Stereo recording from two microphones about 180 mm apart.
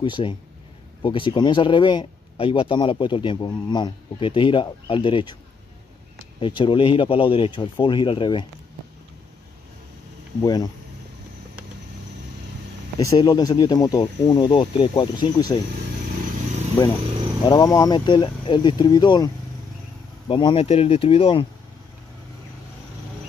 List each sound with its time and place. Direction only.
0.0 s speech: 25° left (ahead or behind)
6.4 s speech: 30° left (ahead or behind)
10.4 s speech: 20° left (ahead or behind)
13.0 s speech: 20° left (ahead or behind)
16.8 s speech: 25° left (ahead or behind)